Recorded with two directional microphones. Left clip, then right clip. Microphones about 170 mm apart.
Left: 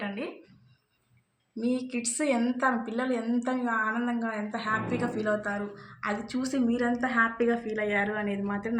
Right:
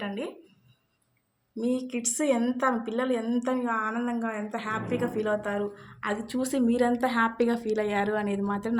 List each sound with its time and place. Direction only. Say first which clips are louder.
1.5 s a woman's voice: right 1 dB; 30° right (ahead or behind)
4.9 s a woman's voice: right 1 dB; 50° right (ahead or behind)
6.1 s a woman's voice: right 2 dB; 75° right (ahead or behind)